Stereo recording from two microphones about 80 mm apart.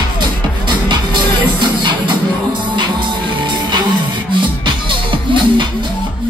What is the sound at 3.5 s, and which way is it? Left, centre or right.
Music, right.